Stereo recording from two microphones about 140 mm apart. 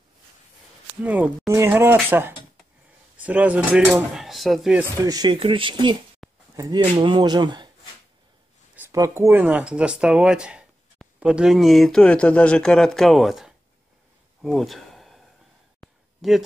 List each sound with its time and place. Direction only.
1.0 s speech: 10° right (ahead or behind)
5.0 s speech: 30° right (ahead or behind)
8.9 s speech: 20° right (ahead or behind); by 13.6 s centre (ahead or behind)
14.4 s a sound: centre (ahead or behind)